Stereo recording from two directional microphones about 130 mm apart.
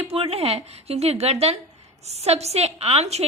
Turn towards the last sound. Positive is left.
turn(degrees=-55)  # may be behind; listen again after turning